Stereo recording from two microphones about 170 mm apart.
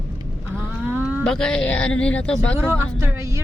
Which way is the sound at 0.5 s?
10° right (ahead or behind).